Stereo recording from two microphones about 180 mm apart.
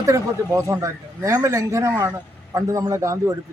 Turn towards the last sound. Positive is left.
turn(degrees=-15)  # may be behind; listen again after turning